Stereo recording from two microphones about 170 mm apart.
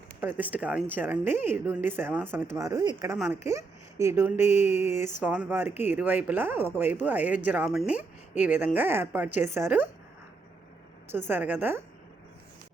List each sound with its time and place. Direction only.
0.2 s speech: 10° right (ahead or behind)
11.1 s speech: 10° right (ahead or behind)